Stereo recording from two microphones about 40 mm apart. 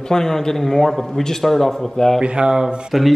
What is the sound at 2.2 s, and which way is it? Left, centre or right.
Speech, right.